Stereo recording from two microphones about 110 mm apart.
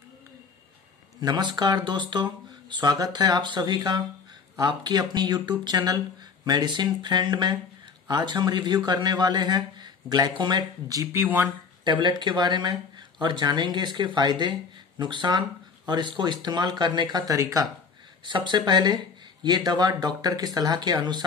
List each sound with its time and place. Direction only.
1.2 s speech: 40° right (ahead or behind)
11.2 s speech: 20° right (ahead or behind)
11.8 s speech: 45° right (ahead or behind)
18.2 s speech: 45° right (ahead or behind)